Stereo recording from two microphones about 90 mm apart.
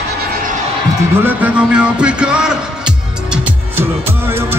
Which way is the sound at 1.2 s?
15° right (ahead or behind).